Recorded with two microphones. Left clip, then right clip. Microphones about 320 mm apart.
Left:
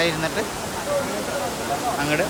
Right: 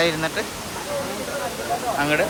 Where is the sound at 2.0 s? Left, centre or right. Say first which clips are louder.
Right 4 dB; centre.